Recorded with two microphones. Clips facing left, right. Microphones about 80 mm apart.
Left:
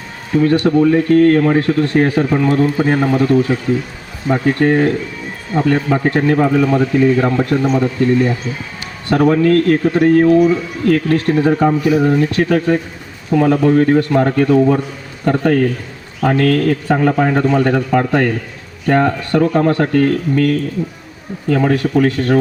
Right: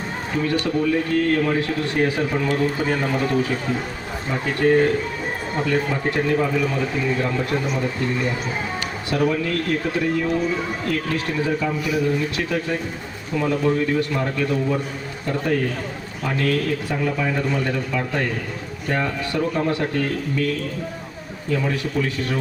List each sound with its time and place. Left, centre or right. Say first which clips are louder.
0.4 s speech: left 10 dB; left
3.5 s speech: left 7 dB; left
4.3 s a man's voice: left 6 dB; left